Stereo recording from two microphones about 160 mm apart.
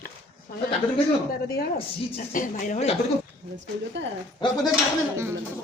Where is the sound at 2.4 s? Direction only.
45° left (ahead or behind).